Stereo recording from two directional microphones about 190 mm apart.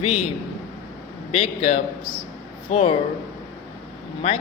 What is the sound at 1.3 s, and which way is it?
A man's voice, 35° left (ahead or behind).